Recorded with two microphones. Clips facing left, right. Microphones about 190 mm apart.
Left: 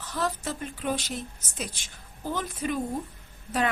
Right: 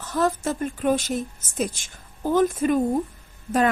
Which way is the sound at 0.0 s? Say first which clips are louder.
Right 7 dB; 50° right (ahead or behind).